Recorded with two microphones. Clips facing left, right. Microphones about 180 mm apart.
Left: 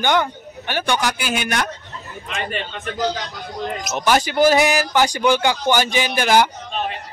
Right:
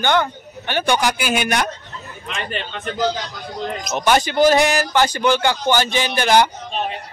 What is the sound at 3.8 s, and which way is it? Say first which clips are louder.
Speech: right 1 dB; 5° left (ahead or behind).